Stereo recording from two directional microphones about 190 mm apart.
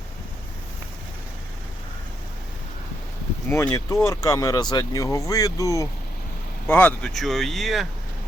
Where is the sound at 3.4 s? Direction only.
10° left (ahead or behind).